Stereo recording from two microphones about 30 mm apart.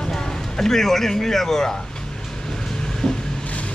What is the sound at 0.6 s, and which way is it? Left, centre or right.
Speech, centre.